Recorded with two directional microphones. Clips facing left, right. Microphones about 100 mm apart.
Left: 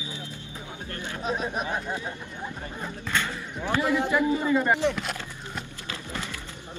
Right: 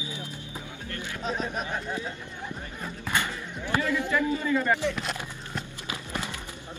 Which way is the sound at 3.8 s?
20° left (ahead or behind).